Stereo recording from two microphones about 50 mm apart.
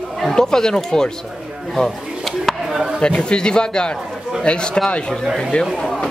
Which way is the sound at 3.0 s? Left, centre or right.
Left.